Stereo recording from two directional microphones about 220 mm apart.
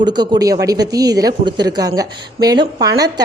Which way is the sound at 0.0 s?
20° right (ahead or behind).